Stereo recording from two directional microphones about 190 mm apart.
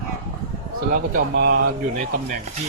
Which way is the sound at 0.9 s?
55° right (ahead or behind).